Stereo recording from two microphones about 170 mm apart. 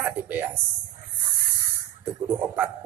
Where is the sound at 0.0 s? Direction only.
10° right (ahead or behind).